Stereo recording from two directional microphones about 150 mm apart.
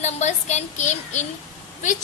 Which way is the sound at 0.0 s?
50° left (ahead or behind).